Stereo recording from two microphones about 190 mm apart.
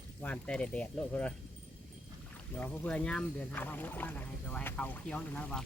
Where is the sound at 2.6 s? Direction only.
5° left (ahead or behind).